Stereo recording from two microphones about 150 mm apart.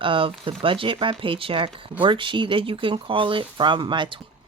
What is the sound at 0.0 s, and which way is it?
A woman's voice, 35° right (ahead or behind).